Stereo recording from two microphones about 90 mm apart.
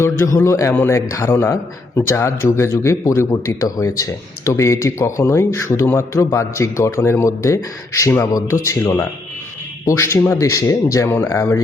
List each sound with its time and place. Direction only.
0.0 s a man's voice: 30° left (ahead or behind)